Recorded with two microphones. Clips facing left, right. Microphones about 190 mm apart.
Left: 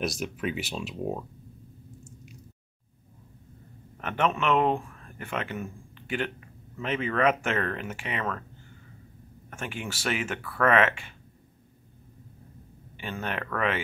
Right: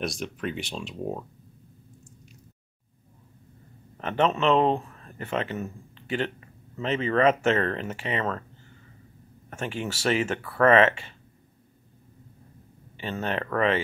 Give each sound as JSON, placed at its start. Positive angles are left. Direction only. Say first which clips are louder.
{"t": 0.0, "sound": "speech", "louder": "left 1 dB", "side_deg": 5}
{"t": 4.0, "sound": "speech", "louder": "right 3 dB", "side_deg": -30}
{"t": 9.5, "sound": "speech", "louder": "right 4 dB", "side_deg": -25}
{"t": 12.9, "sound": "speech", "louder": "right 4 dB", "side_deg": -25}